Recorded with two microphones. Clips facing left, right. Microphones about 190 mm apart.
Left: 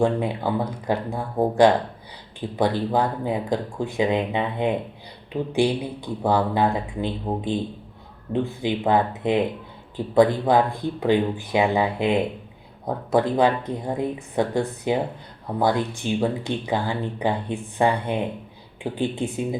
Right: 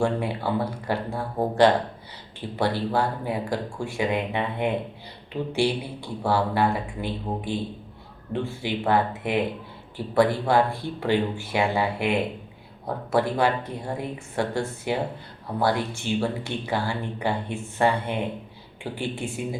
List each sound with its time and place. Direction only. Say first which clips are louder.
0.0 s speech: left 3 dB; 15° left (ahead or behind)